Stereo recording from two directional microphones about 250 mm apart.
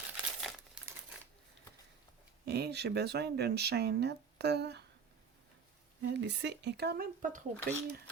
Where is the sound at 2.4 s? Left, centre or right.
Right.